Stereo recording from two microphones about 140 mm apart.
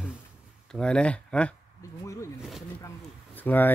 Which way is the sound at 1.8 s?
20° left (ahead or behind).